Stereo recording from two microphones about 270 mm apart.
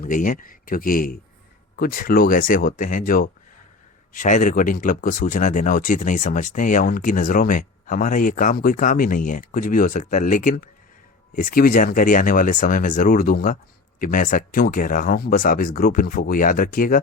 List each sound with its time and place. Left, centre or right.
0.0 s speech: left